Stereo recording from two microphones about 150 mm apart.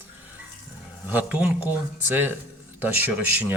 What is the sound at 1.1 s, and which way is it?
Speech, 10° right (ahead or behind).